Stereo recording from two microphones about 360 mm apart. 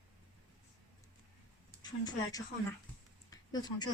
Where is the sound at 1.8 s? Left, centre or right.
Centre.